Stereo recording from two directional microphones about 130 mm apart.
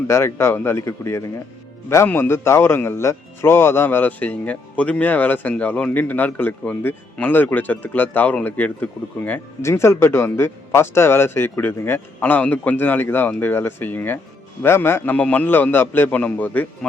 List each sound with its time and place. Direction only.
0.1 s a man's voice: 20° left (ahead or behind)